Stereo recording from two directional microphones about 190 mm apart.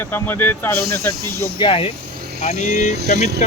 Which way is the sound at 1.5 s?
25° left (ahead or behind).